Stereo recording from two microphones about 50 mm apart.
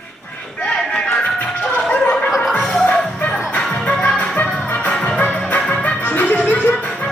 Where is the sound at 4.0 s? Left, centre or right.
Left.